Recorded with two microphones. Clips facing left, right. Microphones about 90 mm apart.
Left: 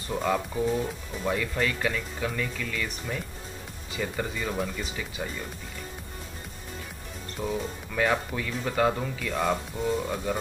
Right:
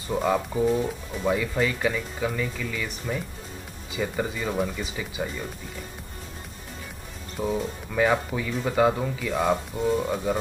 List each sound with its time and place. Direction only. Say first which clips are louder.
0.1 s speech: right 3 dB; 10° right (ahead or behind)
7.3 s speech: right 4 dB; 5° right (ahead or behind)